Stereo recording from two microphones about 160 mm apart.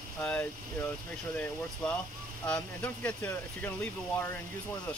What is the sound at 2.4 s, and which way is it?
Speech, 10° left (ahead or behind).